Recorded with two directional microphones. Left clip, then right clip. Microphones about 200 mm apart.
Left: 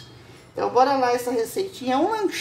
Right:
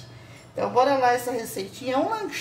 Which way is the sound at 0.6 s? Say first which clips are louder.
Left 1 dB; 25° left (ahead or behind).